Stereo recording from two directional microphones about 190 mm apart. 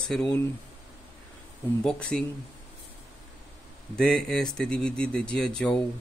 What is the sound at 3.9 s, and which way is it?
Speech, 5° left (ahead or behind).